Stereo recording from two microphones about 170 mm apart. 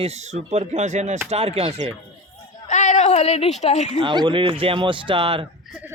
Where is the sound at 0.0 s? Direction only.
40° right (ahead or behind).